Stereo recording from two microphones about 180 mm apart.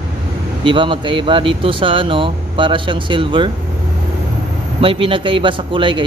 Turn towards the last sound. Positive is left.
turn(degrees=-30)  # may be behind; listen again after turning